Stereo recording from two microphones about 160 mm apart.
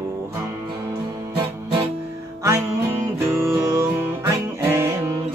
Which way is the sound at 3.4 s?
15° right (ahead or behind).